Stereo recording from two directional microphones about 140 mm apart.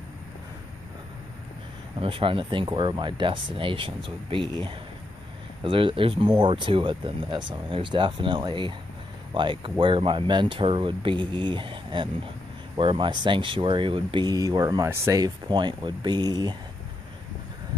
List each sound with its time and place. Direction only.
2.0 s speech: 40° right (ahead or behind)